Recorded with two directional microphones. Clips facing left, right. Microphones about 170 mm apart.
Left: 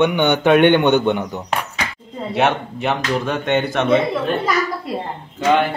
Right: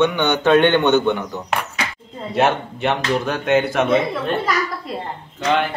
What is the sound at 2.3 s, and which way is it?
Speech, centre (ahead or behind).